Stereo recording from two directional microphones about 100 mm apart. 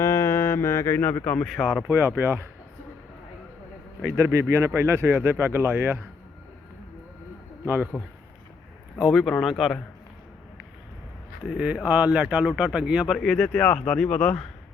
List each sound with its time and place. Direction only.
0.0 s a sound: 30° left (ahead or behind)
1.5 s speech: centre (ahead or behind)
1.9 s speech: 20° right (ahead or behind)
4.0 s speech: 30° right (ahead or behind)
7.9 s speech: 5° right (ahead or behind)
11.5 s speech: 10° right (ahead or behind)
13.1 s speech: 5° left (ahead or behind)